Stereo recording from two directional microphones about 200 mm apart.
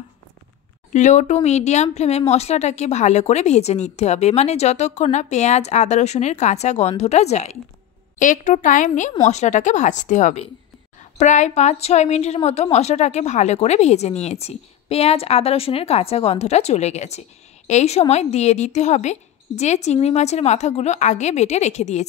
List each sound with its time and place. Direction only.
0.9 s a woman's voice: 35° left (ahead or behind)